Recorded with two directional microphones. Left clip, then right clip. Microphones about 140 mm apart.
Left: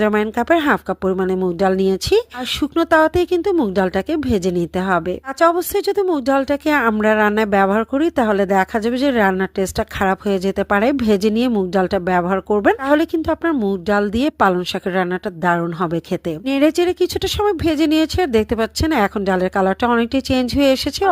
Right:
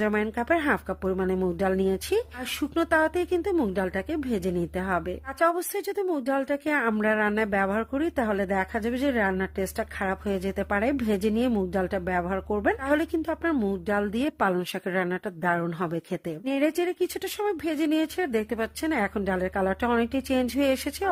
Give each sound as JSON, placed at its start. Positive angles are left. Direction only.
{"t": 0.0, "sound": "speech", "side_deg": 40}
{"t": 13.5, "sound": "speech", "side_deg": 15}
{"t": 13.8, "sound": "speech", "side_deg": 35}